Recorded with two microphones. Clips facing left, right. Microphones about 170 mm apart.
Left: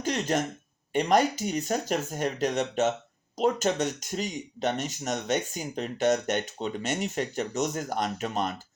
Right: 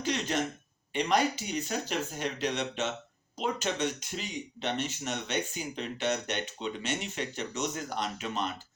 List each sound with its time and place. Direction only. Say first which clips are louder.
0.0 s speech: left 3 dB; 45° left (ahead or behind)